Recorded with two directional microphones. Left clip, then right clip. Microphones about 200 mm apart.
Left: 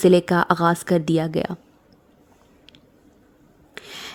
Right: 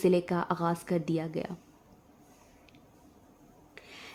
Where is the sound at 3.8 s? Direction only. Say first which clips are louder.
Left 12 dB; 50° left (ahead or behind).